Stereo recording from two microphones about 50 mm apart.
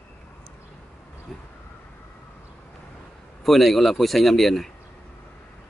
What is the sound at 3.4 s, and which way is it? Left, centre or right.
A man's voice, centre.